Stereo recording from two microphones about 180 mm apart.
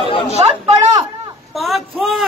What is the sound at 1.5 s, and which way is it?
Speech, centre (ahead or behind).